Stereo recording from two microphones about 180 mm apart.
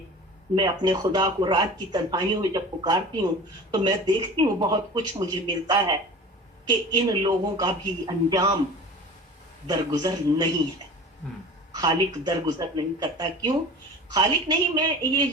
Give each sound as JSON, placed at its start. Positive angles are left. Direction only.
{"t": 0.5, "sound": "speech", "side_deg": -25}
{"t": 9.6, "sound": "speech", "side_deg": -20}
{"t": 11.7, "sound": "speech", "side_deg": -20}